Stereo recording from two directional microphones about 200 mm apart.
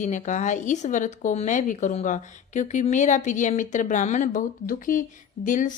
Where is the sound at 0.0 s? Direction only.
35° left (ahead or behind).